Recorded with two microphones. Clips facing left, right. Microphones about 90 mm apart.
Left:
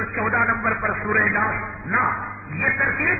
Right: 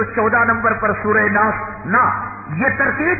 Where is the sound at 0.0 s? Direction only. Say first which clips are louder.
Right 7 dB; 45° right (ahead or behind).